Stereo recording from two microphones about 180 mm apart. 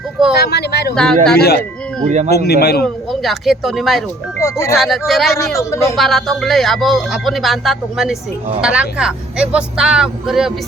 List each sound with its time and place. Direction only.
0.4 s speech: 65° left (ahead or behind)
0.9 s speech: 5° left (ahead or behind)
1.4 s speech: 60° left (ahead or behind)
2.0 s speech: 40° right (ahead or behind)
2.3 s speech: 60° left (ahead or behind)
2.8 s speech: centre (ahead or behind)
4.4 s speech: 15° left (ahead or behind)
4.8 s speech: centre (ahead or behind)
5.5 s speech: 15° left (ahead or behind)
6.0 s speech: centre (ahead or behind)